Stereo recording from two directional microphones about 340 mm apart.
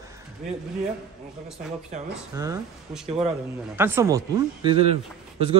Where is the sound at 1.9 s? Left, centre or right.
Right.